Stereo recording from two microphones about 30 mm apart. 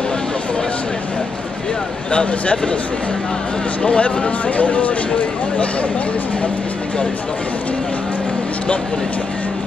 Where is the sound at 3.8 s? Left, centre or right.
Left.